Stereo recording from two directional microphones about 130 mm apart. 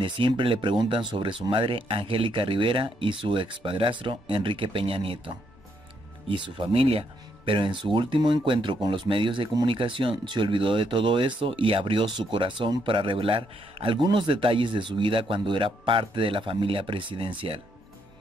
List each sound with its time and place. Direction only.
0.0 s speech: 40° right (ahead or behind)